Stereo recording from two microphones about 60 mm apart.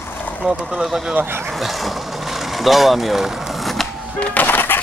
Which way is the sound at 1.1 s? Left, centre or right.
Right.